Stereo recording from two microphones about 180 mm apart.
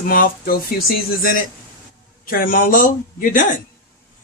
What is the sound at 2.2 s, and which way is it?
Speech, 50° left (ahead or behind).